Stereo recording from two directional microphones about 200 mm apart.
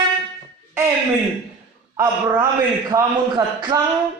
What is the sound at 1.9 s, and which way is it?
A man's voice, 20° right (ahead or behind).